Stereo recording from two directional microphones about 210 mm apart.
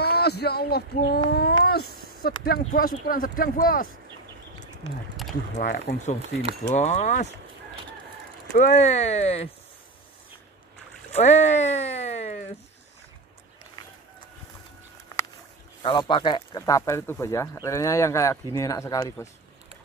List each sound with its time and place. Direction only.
0.0 s speech: 50° left (ahead or behind)
5.6 s speech: 40° left (ahead or behind)
8.5 s speech: 35° left (ahead or behind)
11.1 s boat: 30° left (ahead or behind)
15.8 s speech: 25° left (ahead or behind)